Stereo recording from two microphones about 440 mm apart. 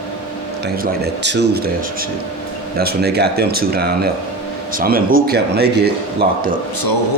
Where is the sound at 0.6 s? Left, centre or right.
Right.